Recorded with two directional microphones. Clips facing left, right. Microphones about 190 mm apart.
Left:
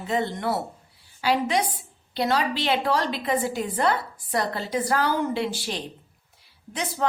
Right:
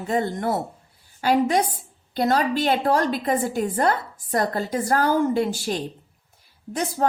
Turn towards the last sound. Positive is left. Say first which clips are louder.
# right 3 dB
turn(degrees=-45)  # may be behind; listen again after turning